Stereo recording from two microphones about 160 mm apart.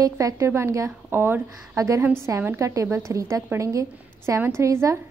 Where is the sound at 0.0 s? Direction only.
20° right (ahead or behind).